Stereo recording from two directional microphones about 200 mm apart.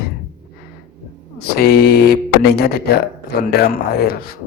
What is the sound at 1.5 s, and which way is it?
Speech, 50° left (ahead or behind).